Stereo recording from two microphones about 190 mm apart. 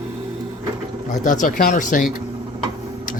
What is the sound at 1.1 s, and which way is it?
Speech, 45° left (ahead or behind).